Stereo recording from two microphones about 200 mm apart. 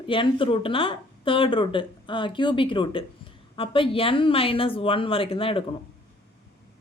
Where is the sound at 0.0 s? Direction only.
25° left (ahead or behind).